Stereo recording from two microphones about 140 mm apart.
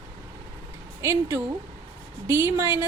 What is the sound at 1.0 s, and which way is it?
A woman's voice, 20° right (ahead or behind).